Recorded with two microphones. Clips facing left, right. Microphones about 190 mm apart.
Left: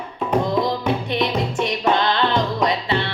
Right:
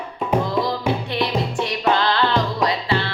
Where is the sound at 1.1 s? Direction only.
20° left (ahead or behind).